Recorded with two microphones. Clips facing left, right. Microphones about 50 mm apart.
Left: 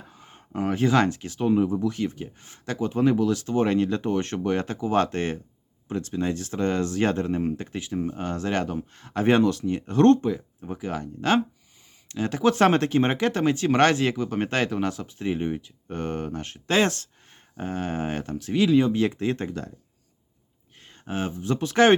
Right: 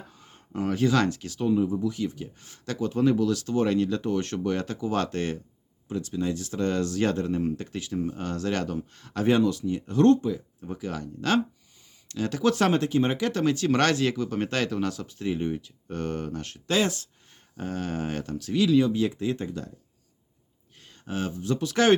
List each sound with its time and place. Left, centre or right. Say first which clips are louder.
0.1 s speech: left 4 dB; left
1.5 s speech: left 2 dB; left
9.3 s speech: left 2 dB; left
10.6 s speech: left 2 dB; left
12.6 s speech: left 3 dB; left
13.4 s speech: left 3 dB; left
16.7 s speech: left 3 dB; left
17.6 s speech: left 2 dB; left
18.9 s speech: left 2 dB; left
20.7 s speech: left 2 dB; left